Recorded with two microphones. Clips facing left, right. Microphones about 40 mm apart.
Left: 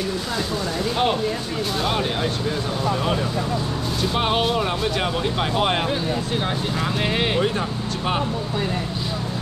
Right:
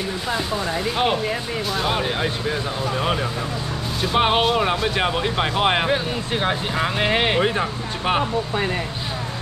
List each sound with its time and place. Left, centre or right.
0.9 s speech: centre
4.0 s speech: centre